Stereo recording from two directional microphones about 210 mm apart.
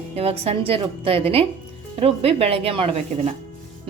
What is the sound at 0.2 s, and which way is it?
A woman's voice, 30° right (ahead or behind).